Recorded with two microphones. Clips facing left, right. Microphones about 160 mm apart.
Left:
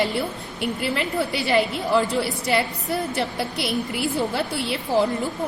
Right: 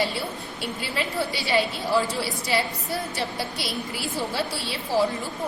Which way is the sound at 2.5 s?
60° left (ahead or behind).